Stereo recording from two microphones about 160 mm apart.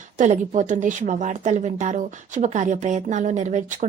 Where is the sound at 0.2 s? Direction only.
50° right (ahead or behind).